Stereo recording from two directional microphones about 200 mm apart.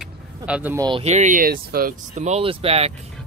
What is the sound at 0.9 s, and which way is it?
Speech, 30° right (ahead or behind).